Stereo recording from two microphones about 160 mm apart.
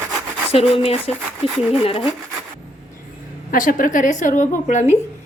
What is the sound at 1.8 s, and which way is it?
Speech, 35° left (ahead or behind).